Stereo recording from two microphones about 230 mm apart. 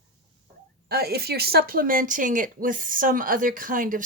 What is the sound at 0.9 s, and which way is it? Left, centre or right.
A woman's voice, right.